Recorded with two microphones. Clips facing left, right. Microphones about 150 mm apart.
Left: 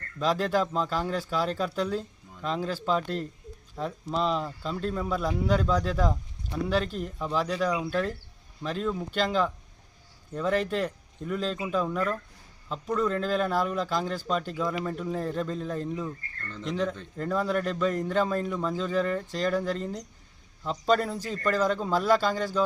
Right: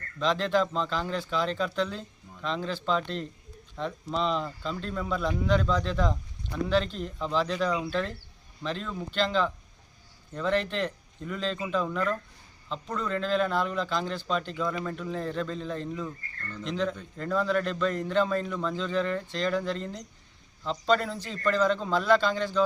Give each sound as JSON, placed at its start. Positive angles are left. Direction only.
{"t": 0.2, "sound": "speech", "side_deg": 10}